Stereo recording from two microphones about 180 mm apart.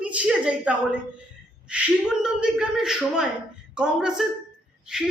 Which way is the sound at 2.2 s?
5° right (ahead or behind).